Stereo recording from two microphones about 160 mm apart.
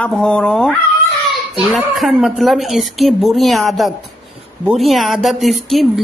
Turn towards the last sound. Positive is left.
turn(degrees=0)  # may be behind; listen again after turning